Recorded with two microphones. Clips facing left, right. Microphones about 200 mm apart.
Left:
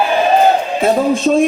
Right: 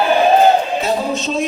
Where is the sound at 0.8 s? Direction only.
50° left (ahead or behind).